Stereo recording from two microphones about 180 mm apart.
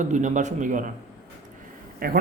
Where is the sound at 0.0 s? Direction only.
45° right (ahead or behind).